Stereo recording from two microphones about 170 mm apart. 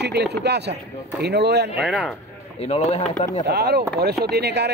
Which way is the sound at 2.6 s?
40° left (ahead or behind).